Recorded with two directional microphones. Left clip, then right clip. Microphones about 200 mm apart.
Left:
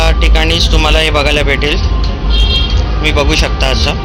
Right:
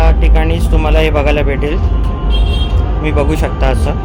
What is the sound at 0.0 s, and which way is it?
Speech, 5° right (ahead or behind).